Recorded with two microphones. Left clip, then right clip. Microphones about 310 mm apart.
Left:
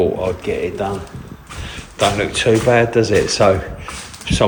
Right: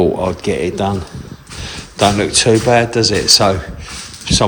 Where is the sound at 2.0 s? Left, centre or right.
Centre.